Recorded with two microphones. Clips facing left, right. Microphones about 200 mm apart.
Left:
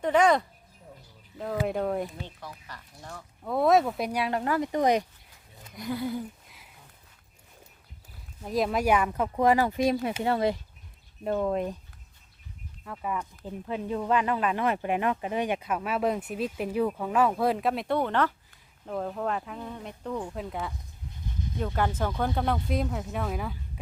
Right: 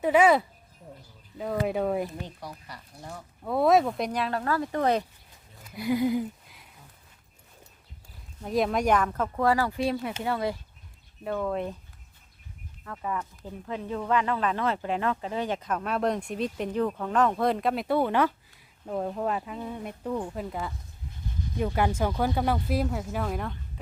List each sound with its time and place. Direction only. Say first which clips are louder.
0.0 s speech: right 2 dB; 5° right (ahead or behind)
3.4 s speech: right 1 dB; centre (ahead or behind); by 5.0 s 15° left (ahead or behind)
5.7 s speech: right 6 dB; 10° right (ahead or behind)
8.4 s speech: right 1 dB; centre (ahead or behind)
12.8 s speech: even; 10° left (ahead or behind)
21.6 s speech: right 3 dB; 10° right (ahead or behind)